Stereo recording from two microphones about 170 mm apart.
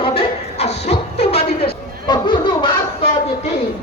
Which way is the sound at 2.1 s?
30° left (ahead or behind).